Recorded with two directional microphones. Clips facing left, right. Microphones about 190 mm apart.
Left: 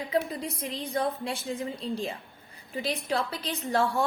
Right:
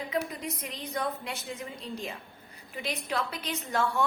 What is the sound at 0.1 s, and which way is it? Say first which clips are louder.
A woman's voice: left 5 dB; 30° left (ahead or behind).